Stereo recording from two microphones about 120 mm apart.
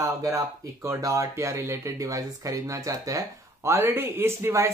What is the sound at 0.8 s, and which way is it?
Speech, 25° right (ahead or behind).